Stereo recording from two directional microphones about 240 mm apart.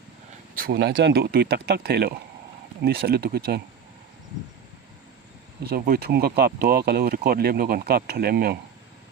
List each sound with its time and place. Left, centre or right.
0.5 s speech: right
5.6 s speech: right